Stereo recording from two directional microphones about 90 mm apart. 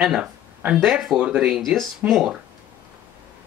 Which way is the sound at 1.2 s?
10° right (ahead or behind).